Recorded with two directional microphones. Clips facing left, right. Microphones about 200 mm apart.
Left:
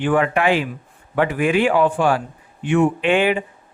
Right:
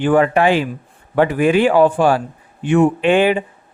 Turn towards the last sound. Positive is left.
turn(degrees=-35)  # may be behind; listen again after turning